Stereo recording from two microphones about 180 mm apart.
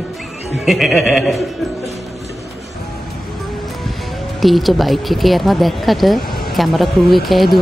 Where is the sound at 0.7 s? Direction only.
Centre (ahead or behind).